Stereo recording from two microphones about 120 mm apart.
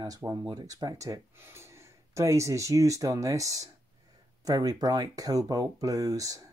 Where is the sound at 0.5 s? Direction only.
35° right (ahead or behind).